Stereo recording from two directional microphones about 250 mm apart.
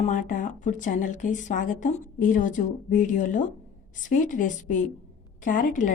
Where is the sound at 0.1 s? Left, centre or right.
Left.